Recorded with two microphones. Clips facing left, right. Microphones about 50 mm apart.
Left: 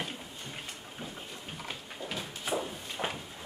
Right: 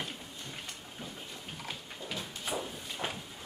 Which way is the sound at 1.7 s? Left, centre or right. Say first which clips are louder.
Left 1 dB; centre.